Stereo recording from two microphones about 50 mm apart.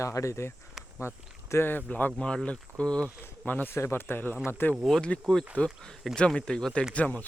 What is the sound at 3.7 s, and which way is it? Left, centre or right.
Speech, left.